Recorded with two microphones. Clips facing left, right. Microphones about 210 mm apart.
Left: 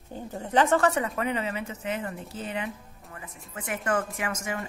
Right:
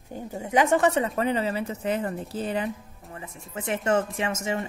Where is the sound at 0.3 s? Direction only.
10° right (ahead or behind).